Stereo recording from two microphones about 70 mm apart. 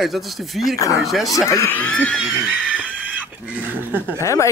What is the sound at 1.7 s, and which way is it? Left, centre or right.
Speech, left.